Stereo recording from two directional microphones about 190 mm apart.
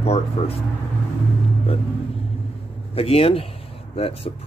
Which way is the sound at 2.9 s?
30° left (ahead or behind).